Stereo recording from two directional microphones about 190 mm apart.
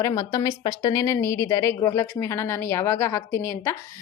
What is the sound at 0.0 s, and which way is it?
A woman's voice, 20° left (ahead or behind).